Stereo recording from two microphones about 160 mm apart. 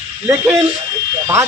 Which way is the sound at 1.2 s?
20° right (ahead or behind).